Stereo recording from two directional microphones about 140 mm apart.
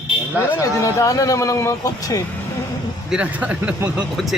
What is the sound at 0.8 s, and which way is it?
Speech, 25° left (ahead or behind).